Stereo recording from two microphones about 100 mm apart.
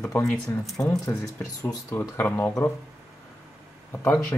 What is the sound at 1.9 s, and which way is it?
Speech, 20° left (ahead or behind).